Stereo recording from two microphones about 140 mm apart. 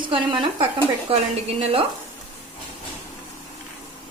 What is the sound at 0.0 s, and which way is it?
A woman's voice, 35° right (ahead or behind).